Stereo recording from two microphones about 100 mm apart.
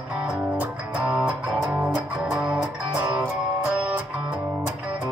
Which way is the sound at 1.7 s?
Centre (ahead or behind).